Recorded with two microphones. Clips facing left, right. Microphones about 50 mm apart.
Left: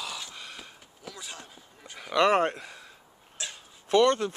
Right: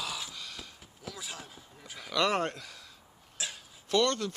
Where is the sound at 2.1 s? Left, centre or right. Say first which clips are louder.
Left 6 dB; left.